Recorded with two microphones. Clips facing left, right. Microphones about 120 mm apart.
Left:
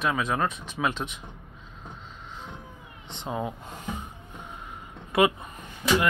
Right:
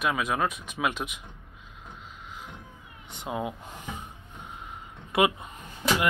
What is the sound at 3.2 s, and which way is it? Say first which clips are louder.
Speech: left 1 dB; 10° right (ahead or behind).